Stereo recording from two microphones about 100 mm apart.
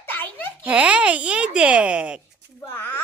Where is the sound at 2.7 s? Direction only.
20° left (ahead or behind).